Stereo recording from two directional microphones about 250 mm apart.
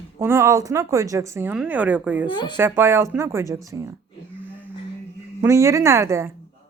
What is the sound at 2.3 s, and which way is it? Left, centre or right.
Speech, centre.